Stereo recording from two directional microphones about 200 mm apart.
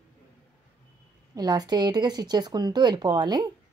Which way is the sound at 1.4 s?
20° right (ahead or behind).